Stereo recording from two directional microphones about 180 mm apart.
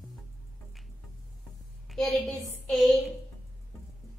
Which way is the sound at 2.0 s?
Centre (ahead or behind).